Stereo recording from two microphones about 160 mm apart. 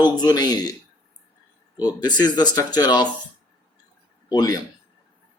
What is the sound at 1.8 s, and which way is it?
Speech, 25° left (ahead or behind).